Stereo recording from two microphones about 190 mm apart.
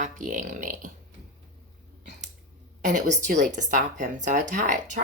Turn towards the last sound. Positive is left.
turn(degrees=-40)  # may be behind; listen again after turning